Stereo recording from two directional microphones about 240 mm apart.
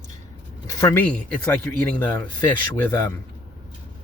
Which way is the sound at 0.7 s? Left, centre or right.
Centre.